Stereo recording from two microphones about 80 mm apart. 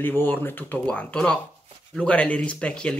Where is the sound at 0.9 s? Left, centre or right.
Centre.